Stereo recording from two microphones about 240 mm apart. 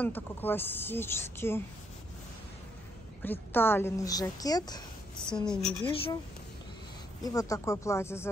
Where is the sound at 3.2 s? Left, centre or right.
Centre.